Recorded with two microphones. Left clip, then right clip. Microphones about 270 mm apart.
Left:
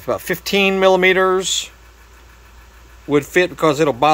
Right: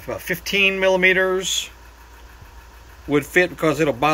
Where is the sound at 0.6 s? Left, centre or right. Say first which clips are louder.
Left 3 dB; left.